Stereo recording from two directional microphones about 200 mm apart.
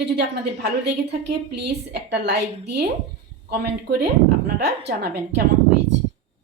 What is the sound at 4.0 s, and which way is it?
A woman's voice, 55° right (ahead or behind).